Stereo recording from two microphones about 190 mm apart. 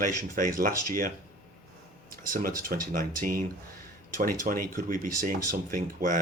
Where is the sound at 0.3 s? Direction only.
45° right (ahead or behind).